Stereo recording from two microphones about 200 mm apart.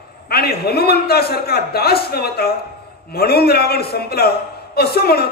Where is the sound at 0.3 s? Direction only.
50° left (ahead or behind).